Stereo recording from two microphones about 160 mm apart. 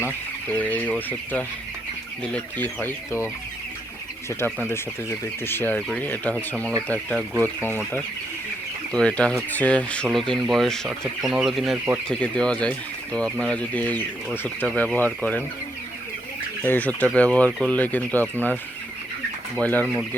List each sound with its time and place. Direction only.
0.0 s speech: 10° left (ahead or behind)
4.3 s speech: 15° left (ahead or behind)
8.9 s speech: 5° left (ahead or behind)
16.6 s speech: 10° left (ahead or behind)
19.5 s speech: 10° left (ahead or behind)